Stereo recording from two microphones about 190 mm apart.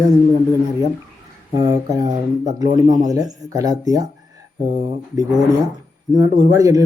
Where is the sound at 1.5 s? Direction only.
20° right (ahead or behind).